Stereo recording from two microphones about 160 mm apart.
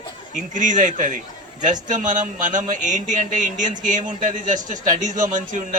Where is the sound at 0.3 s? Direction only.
50° right (ahead or behind).